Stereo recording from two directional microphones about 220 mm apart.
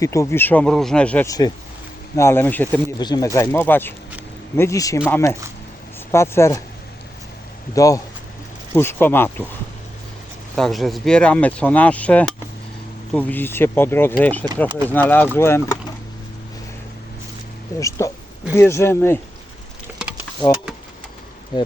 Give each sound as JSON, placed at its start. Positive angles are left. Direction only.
{"t": 0.0, "sound": "speech", "side_deg": 15}
{"t": 7.8, "sound": "speech", "side_deg": 15}
{"t": 10.5, "sound": "speech", "side_deg": 0}
{"t": 17.7, "sound": "speech", "side_deg": 15}
{"t": 20.4, "sound": "speech", "side_deg": 15}